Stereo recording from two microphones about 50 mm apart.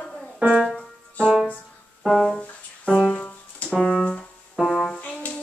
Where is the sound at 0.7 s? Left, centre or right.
Centre.